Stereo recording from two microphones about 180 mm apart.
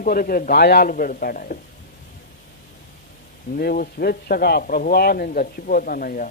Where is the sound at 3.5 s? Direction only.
55° left (ahead or behind).